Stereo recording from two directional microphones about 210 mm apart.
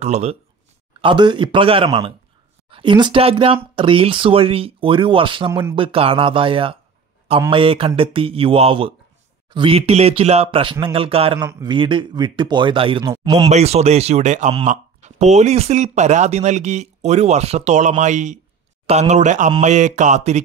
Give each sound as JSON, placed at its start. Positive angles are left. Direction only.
{"t": 0.0, "sound": "speech", "side_deg": -30}
{"t": 5.5, "sound": "speech", "side_deg": -15}
{"t": 5.8, "sound": "speech", "side_deg": -25}
{"t": 13.5, "sound": "speech", "side_deg": -30}